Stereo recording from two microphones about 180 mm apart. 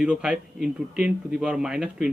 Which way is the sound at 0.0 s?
5° right (ahead or behind).